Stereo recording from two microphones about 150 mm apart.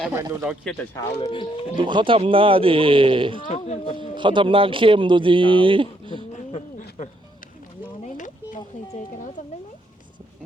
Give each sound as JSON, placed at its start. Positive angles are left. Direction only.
{"t": 0.1, "sound": "speech", "side_deg": -20}
{"t": 0.4, "sound": "speech", "side_deg": 0}
{"t": 1.1, "sound": "speech", "side_deg": 40}
{"t": 1.7, "sound": "a man's voice", "side_deg": -30}
{"t": 3.5, "sound": "speech", "side_deg": 50}
{"t": 4.1, "sound": "a man's voice", "side_deg": -30}
{"t": 6.3, "sound": "bird", "side_deg": 55}
{"t": 8.0, "sound": "a sound", "side_deg": 60}